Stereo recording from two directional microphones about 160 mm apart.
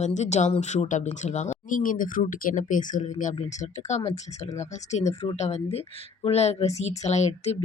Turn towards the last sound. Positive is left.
turn(degrees=45)  # may be behind; listen again after turning